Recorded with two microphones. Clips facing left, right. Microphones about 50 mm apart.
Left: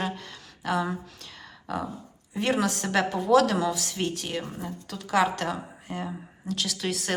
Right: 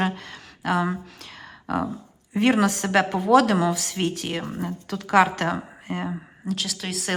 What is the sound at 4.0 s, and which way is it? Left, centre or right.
Speech, right.